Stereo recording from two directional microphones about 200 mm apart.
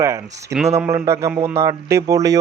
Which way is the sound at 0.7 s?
10° right (ahead or behind).